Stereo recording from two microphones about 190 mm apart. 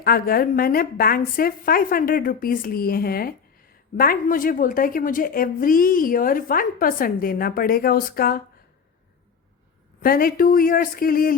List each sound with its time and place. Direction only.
0.0 s a woman's voice: 50° left (ahead or behind)
10.0 s a woman's voice: 50° left (ahead or behind)